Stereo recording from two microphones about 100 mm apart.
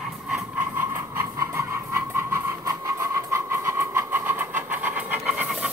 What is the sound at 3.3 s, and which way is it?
Vehicle, 25° right (ahead or behind).